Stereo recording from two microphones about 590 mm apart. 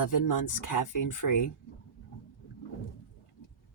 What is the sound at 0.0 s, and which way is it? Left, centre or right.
Speech, left.